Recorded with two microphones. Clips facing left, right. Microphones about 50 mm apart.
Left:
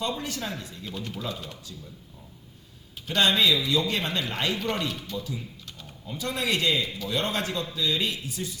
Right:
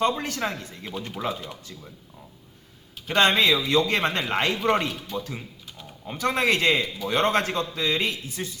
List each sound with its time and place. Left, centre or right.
0.0 s a man's voice: right
1.3 s speech: right
3.2 s a man's voice: right
4.9 s speech: centre
5.1 s a man's voice: right